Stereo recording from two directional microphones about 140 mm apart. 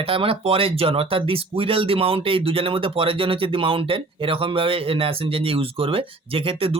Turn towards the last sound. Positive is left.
turn(degrees=-45)  # may be behind; listen again after turning